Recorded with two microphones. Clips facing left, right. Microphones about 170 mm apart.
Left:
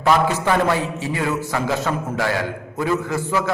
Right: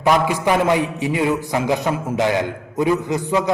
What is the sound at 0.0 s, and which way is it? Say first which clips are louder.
A man's voice: right 1 dB; 15° right (ahead or behind).